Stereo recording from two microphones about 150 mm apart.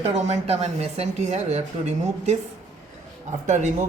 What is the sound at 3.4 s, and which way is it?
Speech, 50° right (ahead or behind).